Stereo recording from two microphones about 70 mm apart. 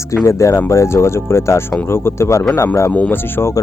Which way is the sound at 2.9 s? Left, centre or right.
Left.